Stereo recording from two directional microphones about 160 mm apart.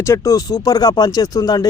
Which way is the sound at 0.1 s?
20° left (ahead or behind).